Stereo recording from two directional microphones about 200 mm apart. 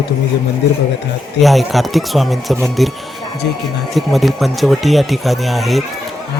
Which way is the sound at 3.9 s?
Centre (ahead or behind).